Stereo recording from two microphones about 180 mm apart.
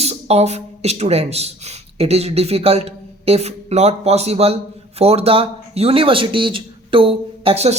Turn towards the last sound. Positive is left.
turn(degrees=-35)  # may be behind; listen again after turning